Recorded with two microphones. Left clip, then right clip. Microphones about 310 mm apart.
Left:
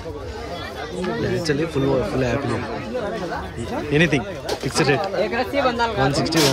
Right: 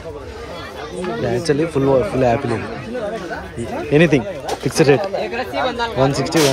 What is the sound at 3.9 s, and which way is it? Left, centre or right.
Speech, centre.